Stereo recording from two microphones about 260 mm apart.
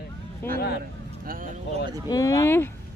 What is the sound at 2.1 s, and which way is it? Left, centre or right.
Speech, centre.